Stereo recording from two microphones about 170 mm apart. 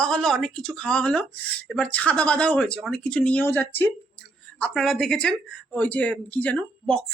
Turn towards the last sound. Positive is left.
turn(degrees=5)  # may be behind; listen again after turning